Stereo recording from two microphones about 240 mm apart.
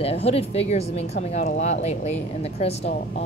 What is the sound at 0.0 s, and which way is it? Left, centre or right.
Speech, left.